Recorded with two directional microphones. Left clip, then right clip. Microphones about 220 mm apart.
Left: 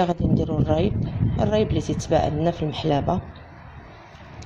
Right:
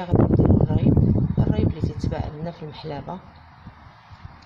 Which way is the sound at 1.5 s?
30° left (ahead or behind).